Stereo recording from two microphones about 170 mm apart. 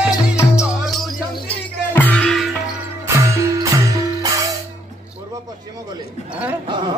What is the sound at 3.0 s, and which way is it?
Music, 15° right (ahead or behind).